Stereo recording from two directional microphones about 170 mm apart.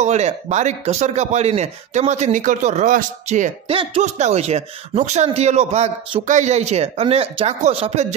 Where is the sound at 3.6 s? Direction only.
35° right (ahead or behind).